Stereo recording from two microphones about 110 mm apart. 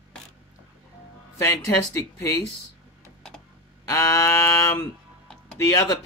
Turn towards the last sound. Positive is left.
turn(degrees=25)  # may be behind; listen again after turning